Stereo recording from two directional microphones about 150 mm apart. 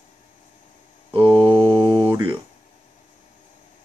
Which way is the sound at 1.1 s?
35° right (ahead or behind).